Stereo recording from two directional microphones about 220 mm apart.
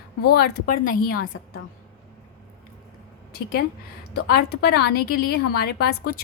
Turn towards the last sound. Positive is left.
turn(degrees=45)  # may be behind; listen again after turning